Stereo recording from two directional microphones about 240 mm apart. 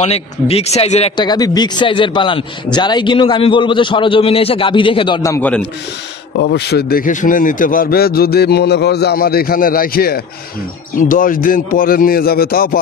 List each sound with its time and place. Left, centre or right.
0.0 s speech: left; by 5.7 s centre
6.3 s a man's voice: left